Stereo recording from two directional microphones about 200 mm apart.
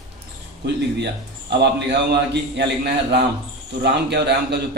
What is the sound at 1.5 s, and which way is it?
Speech, 60° right (ahead or behind).